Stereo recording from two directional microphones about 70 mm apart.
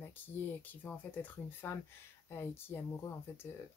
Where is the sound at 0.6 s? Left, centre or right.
Left.